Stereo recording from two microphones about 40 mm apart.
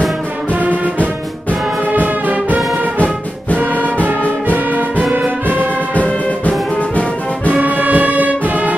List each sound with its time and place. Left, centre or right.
0.5 s music: right
4.0 s brass instrument: right
7.6 s music: right